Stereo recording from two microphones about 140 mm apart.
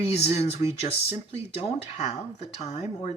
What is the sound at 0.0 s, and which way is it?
Speech, 45° left (ahead or behind).